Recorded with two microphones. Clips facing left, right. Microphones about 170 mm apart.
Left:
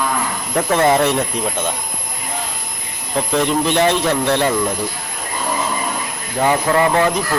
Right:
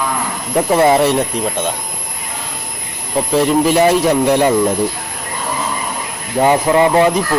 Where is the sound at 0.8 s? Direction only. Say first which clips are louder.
Right 1 dB; 5° right (ahead or behind).